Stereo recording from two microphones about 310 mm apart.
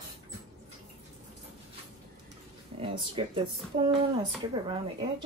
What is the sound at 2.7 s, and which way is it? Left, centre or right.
Speech, centre.